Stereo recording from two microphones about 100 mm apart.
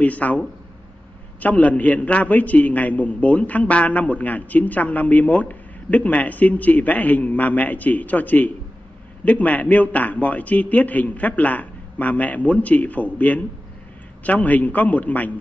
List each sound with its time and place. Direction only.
0.0 s a man's voice: 15° left (ahead or behind)